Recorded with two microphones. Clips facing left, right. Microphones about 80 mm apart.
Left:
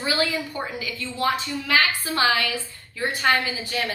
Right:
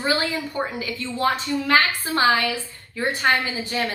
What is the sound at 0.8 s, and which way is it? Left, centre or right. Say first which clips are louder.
A woman's voice: right 2 dB; right.